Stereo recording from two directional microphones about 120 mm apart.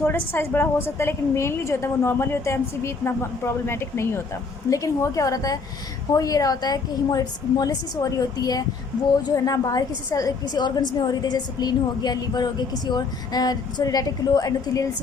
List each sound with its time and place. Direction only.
0.0 s a woman's voice: 15° left (ahead or behind)